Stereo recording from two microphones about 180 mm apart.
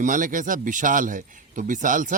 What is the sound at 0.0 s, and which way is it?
A man's voice, 45° right (ahead or behind).